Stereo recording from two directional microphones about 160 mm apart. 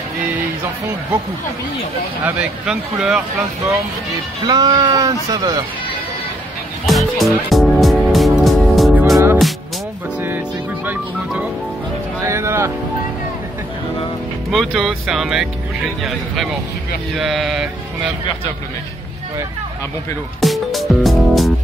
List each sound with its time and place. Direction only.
2.2 s mantra: 5° right (ahead or behind)
4.5 s speech: 25° right (ahead or behind)
6.9 s music: centre (ahead or behind)
12.3 s music: 15° right (ahead or behind)
14.5 s mantra: centre (ahead or behind)
17.2 s mantra: centre (ahead or behind)
20.3 s music: centre (ahead or behind)